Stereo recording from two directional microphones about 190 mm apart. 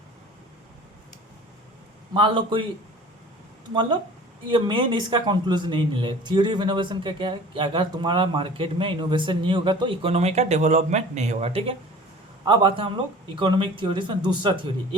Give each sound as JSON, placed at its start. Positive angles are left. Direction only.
{"t": 2.1, "sound": "speech", "side_deg": -25}
{"t": 3.8, "sound": "speech", "side_deg": -25}